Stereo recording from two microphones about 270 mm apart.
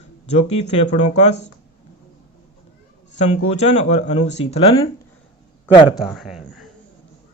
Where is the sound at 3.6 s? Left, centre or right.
Left.